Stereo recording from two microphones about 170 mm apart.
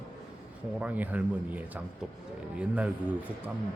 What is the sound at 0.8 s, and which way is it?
A man's voice, 10° right (ahead or behind).